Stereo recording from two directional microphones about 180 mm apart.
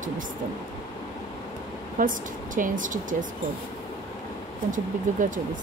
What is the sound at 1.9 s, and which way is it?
A woman's voice, 50° right (ahead or behind).